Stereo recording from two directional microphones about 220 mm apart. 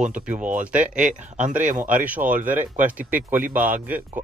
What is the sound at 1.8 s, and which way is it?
Speech, 5° right (ahead or behind).